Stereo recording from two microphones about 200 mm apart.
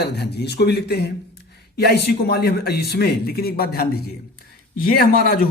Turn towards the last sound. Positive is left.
turn(degrees=50)  # may be behind; listen again after turning